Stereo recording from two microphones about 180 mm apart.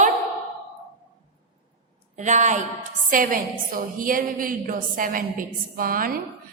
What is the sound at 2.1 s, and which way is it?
A woman's voice, 40° right (ahead or behind).